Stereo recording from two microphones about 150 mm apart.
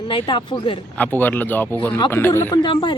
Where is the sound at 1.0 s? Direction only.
10° left (ahead or behind).